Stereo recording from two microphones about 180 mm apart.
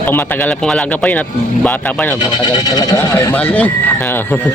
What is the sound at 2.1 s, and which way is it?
Speech, 25° left (ahead or behind).